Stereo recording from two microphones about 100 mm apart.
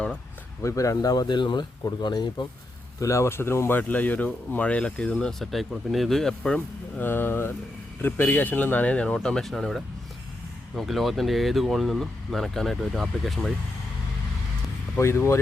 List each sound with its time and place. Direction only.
0.6 s speech: 35° left (ahead or behind)
3.0 s speech: 30° left (ahead or behind); by 13.5 s centre (ahead or behind)
14.9 s speech: 25° left (ahead or behind)